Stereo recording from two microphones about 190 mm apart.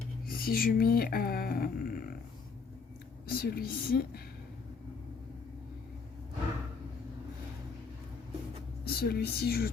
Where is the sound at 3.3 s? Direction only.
50° left (ahead or behind).